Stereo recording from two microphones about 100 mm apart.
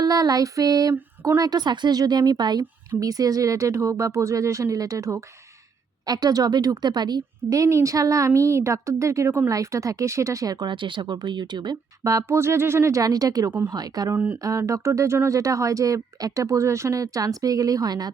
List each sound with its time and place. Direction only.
0.0 s a woman's voice: 40° right (ahead or behind)
12.1 s a woman's voice: 25° right (ahead or behind)
14.1 s speech: 20° right (ahead or behind)
14.4 s a woman's voice: 30° right (ahead or behind)